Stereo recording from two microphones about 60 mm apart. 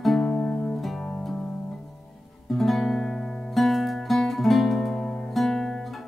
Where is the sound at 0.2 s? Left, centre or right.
Left.